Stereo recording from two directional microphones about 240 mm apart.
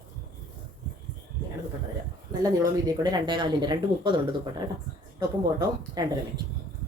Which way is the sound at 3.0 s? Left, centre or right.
Centre.